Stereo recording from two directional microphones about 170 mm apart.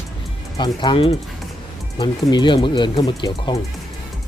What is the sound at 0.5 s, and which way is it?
Speech, 25° left (ahead or behind).